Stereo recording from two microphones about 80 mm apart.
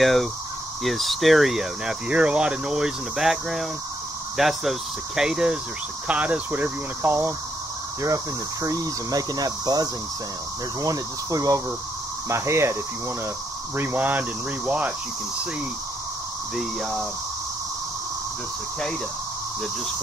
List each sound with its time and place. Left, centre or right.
0.0 s speech: centre; by 7.3 s right
8.6 s speech: right
12.3 s speech: right
13.7 s speech: right
16.5 s speech: centre